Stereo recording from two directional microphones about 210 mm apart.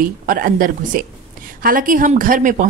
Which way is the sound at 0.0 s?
40° right (ahead or behind).